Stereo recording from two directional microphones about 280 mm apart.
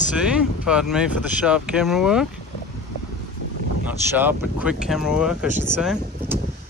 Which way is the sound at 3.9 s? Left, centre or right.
Centre.